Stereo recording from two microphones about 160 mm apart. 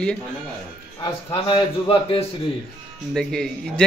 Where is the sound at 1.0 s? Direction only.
30° left (ahead or behind).